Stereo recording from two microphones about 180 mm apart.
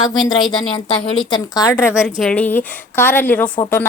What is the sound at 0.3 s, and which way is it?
Speech, 25° left (ahead or behind).